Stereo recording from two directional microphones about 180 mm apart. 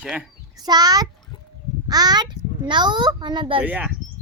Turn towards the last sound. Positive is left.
turn(degrees=-10)  # may be behind; listen again after turning